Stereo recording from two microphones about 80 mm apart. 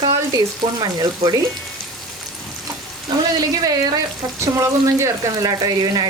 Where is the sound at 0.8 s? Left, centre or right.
Right.